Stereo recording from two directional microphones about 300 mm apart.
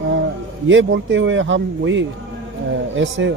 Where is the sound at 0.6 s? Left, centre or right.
Right.